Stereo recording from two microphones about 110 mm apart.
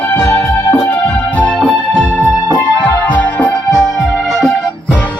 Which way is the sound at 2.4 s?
40° left (ahead or behind).